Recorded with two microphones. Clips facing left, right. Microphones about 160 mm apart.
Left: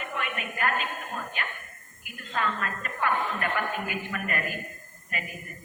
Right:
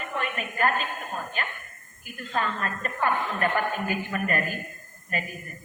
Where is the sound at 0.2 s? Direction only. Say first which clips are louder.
Right 4 dB; 35° right (ahead or behind).